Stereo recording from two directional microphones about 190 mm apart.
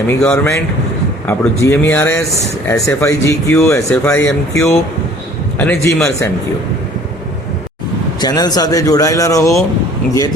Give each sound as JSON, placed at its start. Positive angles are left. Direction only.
{"t": 0.1, "sound": "speech", "side_deg": 10}
{"t": 8.2, "sound": "speech", "side_deg": 20}